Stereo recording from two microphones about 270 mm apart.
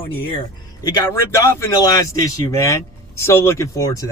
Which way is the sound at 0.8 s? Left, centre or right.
Centre.